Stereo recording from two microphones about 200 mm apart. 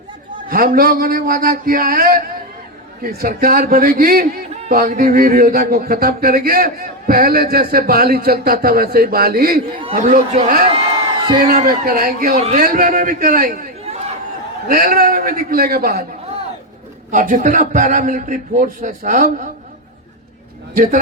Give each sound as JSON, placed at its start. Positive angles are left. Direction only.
{"t": 0.4, "sound": "a man's voice", "side_deg": -45}
{"t": 12.4, "sound": "a man's voice", "side_deg": -30}
{"t": 12.6, "sound": "speech", "side_deg": -45}
{"t": 14.7, "sound": "speech", "side_deg": -45}
{"t": 17.1, "sound": "a man's voice", "side_deg": -40}